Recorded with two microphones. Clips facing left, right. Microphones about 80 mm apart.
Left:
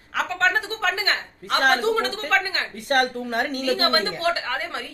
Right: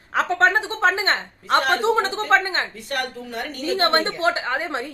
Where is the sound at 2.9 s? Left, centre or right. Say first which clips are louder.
Left 6 dB; left.